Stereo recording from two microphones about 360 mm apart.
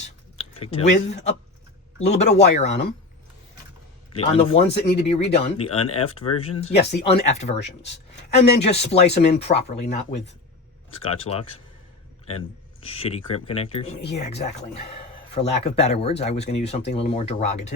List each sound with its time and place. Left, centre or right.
0.6 s speech: centre
4.1 s speech: centre
13.0 s speech: centre